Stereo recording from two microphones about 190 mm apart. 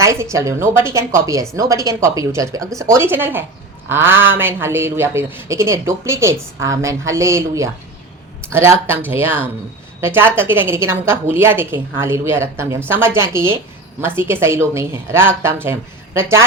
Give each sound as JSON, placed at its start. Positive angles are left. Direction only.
{"t": 0.0, "sound": "speech", "side_deg": -15}